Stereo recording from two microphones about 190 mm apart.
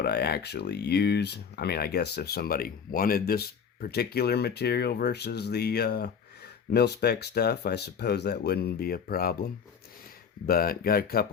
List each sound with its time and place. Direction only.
0.0 s speech: 60° left (ahead or behind)